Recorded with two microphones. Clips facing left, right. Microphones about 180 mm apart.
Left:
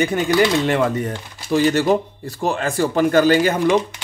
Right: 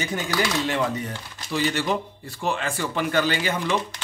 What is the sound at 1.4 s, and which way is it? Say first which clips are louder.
Speech: left 8 dB; 45° left (ahead or behind).